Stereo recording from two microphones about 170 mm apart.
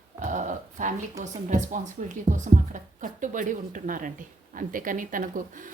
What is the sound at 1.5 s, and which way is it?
Speech, 45° right (ahead or behind).